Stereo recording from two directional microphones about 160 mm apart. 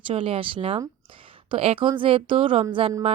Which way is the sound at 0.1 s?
35° right (ahead or behind).